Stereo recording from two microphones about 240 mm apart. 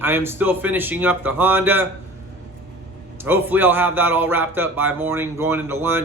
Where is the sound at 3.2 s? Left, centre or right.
Centre.